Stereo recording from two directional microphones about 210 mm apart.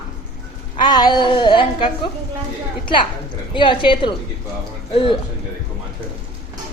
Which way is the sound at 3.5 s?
25° left (ahead or behind).